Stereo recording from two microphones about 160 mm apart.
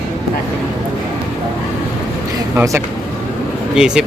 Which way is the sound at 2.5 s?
15° right (ahead or behind).